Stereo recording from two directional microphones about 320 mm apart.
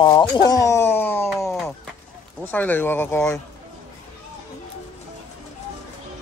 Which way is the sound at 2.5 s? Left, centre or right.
Centre.